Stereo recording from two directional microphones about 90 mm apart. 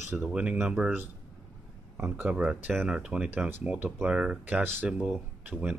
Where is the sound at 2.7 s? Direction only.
5° right (ahead or behind).